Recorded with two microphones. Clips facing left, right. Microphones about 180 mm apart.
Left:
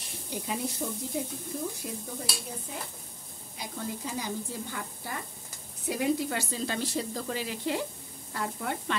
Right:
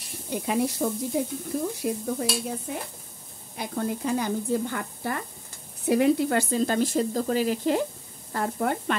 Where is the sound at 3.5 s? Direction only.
55° right (ahead or behind).